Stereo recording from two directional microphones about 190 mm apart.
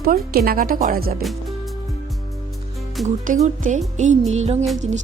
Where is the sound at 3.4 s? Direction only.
40° right (ahead or behind).